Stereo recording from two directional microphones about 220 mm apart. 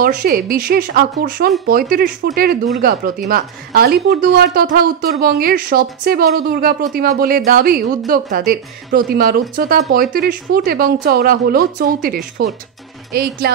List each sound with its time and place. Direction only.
0.0 s speech: 40° right (ahead or behind)